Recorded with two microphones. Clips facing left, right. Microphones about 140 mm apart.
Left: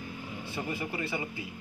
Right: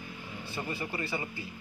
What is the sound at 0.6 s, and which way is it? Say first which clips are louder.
Speech: left 1 dB; 10° left (ahead or behind).